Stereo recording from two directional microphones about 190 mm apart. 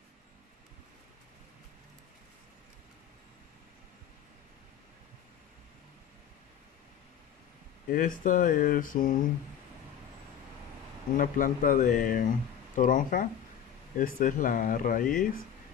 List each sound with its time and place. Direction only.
7.9 s speech: 45° left (ahead or behind)
11.1 s speech: 45° left (ahead or behind)